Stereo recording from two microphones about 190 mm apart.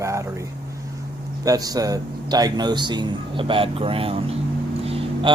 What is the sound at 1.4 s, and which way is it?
A man's voice, 20° right (ahead or behind).